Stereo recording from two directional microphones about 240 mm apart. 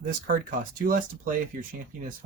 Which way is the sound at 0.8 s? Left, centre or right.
Right.